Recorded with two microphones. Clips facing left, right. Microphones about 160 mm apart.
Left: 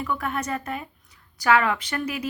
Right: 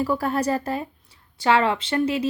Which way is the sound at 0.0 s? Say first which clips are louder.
Right 6 dB; 35° right (ahead or behind).